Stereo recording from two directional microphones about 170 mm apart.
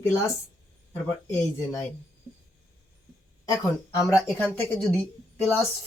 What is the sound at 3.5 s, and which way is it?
Speech, 20° left (ahead or behind).